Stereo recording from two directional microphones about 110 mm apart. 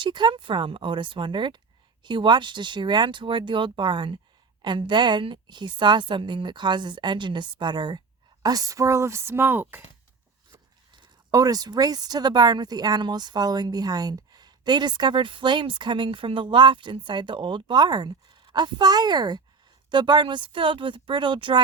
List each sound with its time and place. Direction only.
0.0 s a woman's voice: 45° right (ahead or behind); by 9.8 s 20° right (ahead or behind)
10.5 s a woman's voice: 45° right (ahead or behind)